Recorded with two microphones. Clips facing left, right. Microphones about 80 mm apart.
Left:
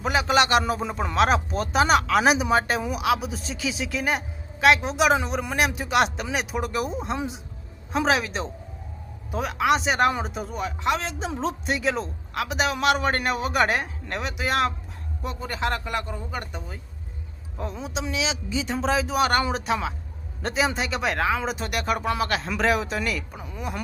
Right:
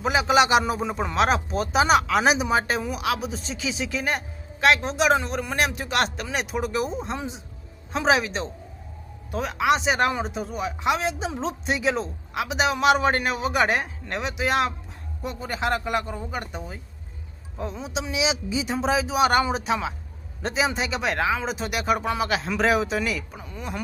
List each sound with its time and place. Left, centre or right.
0.0 s a man's voice: centre
18.2 s speech: centre